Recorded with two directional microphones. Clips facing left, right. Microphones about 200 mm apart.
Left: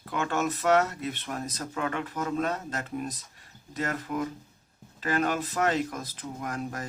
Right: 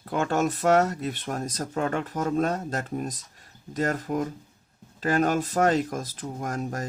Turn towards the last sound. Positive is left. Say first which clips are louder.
# right 3 dB
turn(degrees=-45)  # may be behind; listen again after turning